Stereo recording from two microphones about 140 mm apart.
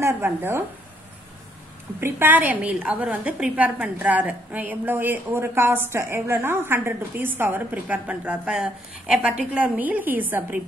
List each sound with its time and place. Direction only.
0.0 s a woman's voice: 15° right (ahead or behind)
2.0 s a woman's voice: 15° right (ahead or behind)